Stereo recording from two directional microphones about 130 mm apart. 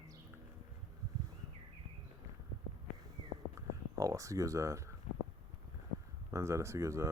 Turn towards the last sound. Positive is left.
turn(degrees=-20)  # may be behind; listen again after turning